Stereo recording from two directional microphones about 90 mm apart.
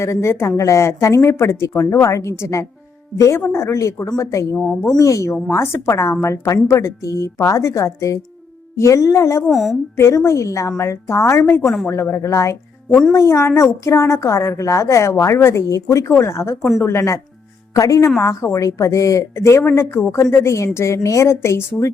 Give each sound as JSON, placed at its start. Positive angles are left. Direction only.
{"t": 0.0, "sound": "a woman's voice", "side_deg": 30}
{"t": 4.5, "sound": "a woman's voice", "side_deg": 10}
{"t": 4.9, "sound": "a woman's voice", "side_deg": 35}
{"t": 9.5, "sound": "a woman's voice", "side_deg": 0}
{"t": 10.0, "sound": "a woman's voice", "side_deg": 30}
{"t": 12.9, "sound": "a woman's voice", "side_deg": 5}
{"t": 13.1, "sound": "a woman's voice", "side_deg": 30}